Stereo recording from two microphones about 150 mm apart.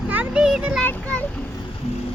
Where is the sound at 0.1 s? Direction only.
10° right (ahead or behind).